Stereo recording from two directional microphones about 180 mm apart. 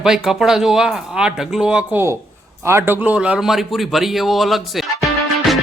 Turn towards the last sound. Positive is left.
turn(degrees=0)  # may be behind; listen again after turning